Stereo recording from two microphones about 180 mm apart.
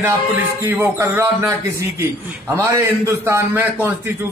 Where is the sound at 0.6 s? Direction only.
10° right (ahead or behind).